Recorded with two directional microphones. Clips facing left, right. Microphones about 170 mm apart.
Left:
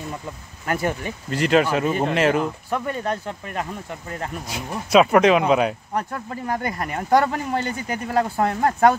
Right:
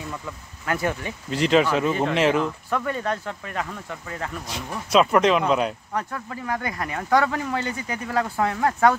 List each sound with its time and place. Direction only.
0.7 s speech: 35° left (ahead or behind)
1.3 s speech: centre (ahead or behind)
2.8 s speech: 25° left (ahead or behind)
4.5 s speech: 10° left (ahead or behind)
6.1 s speech: 35° left (ahead or behind)